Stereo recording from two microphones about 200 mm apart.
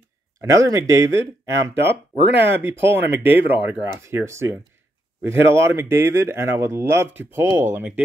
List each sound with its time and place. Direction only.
0.4 s speech: 15° right (ahead or behind)
1.8 s speech: 60° right (ahead or behind)
2.6 s speech: 10° right (ahead or behind)